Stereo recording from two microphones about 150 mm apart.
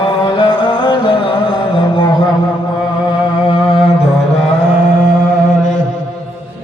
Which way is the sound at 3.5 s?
35° left (ahead or behind).